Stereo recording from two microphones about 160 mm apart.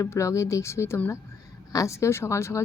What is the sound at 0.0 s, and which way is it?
A woman's voice, 20° left (ahead or behind).